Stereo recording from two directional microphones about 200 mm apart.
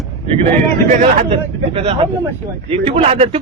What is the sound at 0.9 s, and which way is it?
A man's voice, 30° right (ahead or behind).